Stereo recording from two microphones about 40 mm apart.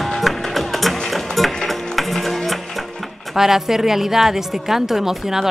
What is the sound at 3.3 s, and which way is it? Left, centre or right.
A woman's voice, centre.